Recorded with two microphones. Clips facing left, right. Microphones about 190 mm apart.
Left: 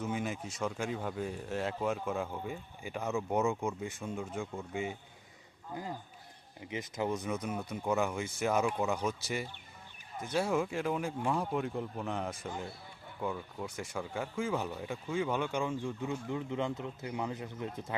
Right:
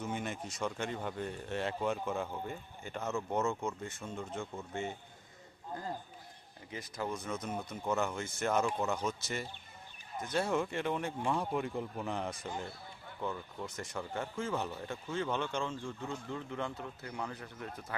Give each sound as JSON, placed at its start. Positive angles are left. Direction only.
{"t": 0.0, "sound": "speech", "side_deg": 5}
{"t": 6.7, "sound": "speech", "side_deg": 20}